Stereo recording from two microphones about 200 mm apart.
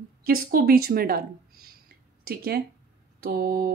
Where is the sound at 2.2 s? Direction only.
50° right (ahead or behind).